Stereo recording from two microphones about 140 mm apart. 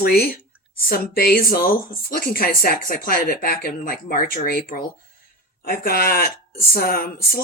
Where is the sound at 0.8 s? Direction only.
90° left.